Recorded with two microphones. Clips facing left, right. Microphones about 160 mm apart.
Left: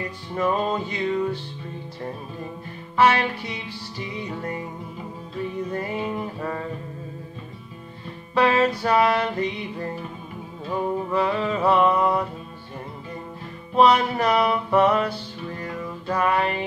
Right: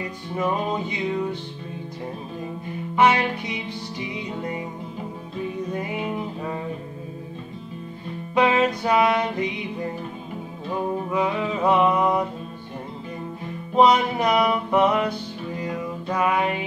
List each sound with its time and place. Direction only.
0.4 s music: 15° right (ahead or behind)
3.0 s music: 15° right (ahead or behind)
5.7 s music: 15° right (ahead or behind)
8.4 s music: 15° right (ahead or behind)
11.1 s music: 10° right (ahead or behind)
13.7 s music: 15° right (ahead or behind)